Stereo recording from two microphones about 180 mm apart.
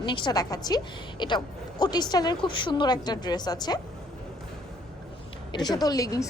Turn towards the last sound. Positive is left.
turn(degrees=20)  # may be behind; listen again after turning